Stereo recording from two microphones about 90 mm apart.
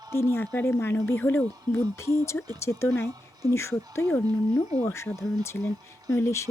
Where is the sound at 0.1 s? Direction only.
25° left (ahead or behind).